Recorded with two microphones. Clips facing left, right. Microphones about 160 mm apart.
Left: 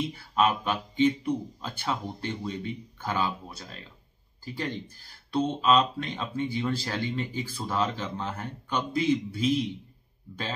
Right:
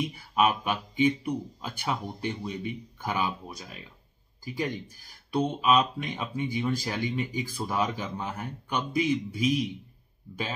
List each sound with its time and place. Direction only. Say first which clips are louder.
0.0 s speech: even; 10° right (ahead or behind)